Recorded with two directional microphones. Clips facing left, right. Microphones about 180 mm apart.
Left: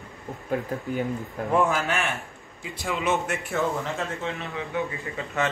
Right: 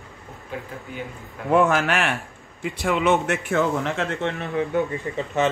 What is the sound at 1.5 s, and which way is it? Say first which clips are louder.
A man's voice: right 5 dB; 80° right.